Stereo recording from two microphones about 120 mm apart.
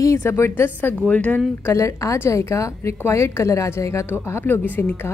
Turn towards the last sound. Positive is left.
turn(degrees=15)  # may be behind; listen again after turning